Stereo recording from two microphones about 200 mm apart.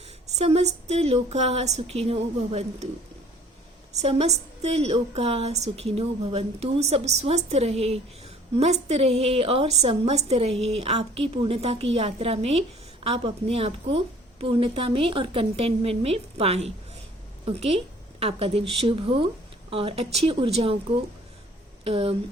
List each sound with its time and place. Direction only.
0.3 s a woman's voice: 30° right (ahead or behind)
4.0 s a woman's voice: 30° right (ahead or behind)